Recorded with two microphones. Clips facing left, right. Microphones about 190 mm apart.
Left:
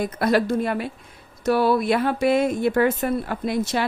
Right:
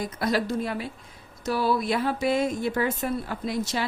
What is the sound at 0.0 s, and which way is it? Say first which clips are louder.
Speech: left 6 dB; 60° left (ahead or behind).